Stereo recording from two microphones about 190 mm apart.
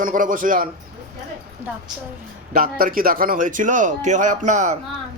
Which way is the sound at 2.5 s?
45° right (ahead or behind).